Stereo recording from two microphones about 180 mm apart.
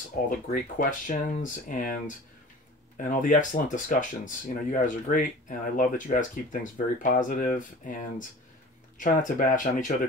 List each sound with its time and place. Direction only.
0.5 s speech: 45° left (ahead or behind)